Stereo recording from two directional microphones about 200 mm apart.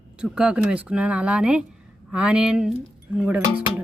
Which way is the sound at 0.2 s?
5° right (ahead or behind).